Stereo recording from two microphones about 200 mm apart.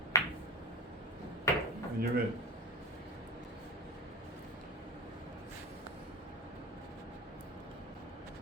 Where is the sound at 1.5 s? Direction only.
15° left (ahead or behind).